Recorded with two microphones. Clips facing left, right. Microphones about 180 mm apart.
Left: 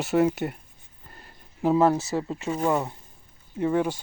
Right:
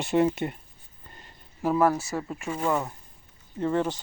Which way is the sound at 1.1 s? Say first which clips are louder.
Left 1 dB; 5° left (ahead or behind).